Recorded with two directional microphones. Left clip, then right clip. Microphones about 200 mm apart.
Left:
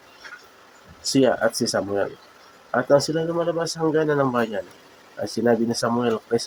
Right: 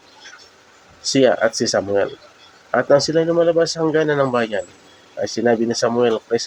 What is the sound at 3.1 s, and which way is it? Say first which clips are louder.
Speech: right 8 dB; 5° right (ahead or behind).